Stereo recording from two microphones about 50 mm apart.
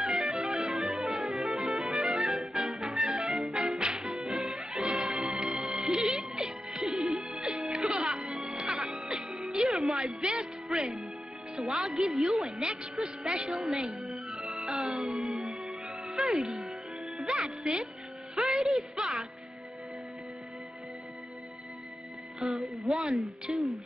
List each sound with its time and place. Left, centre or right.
0.0 s music: centre
11.5 s a woman's voice: centre
14.3 s music: centre
15.0 s music: centre
15.3 s music: centre
16.1 s music: centre
22.4 s music: centre
23.0 s speech: centre